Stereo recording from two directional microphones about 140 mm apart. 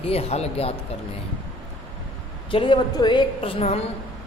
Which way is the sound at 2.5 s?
35° left (ahead or behind).